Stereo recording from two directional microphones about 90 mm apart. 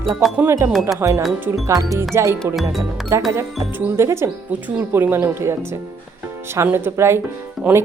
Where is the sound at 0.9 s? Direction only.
30° right (ahead or behind).